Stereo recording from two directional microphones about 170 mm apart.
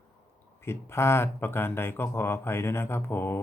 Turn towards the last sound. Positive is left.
turn(degrees=15)  # may be behind; listen again after turning